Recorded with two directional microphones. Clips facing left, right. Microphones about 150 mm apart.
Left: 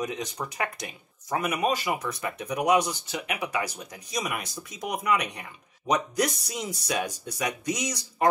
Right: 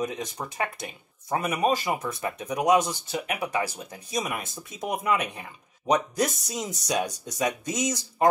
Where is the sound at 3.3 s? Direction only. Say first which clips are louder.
Right 2 dB; 30° right (ahead or behind).